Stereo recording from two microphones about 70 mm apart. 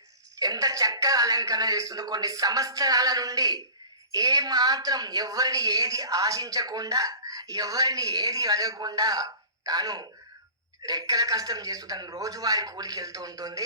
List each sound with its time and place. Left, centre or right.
0.3 s a woman's voice: right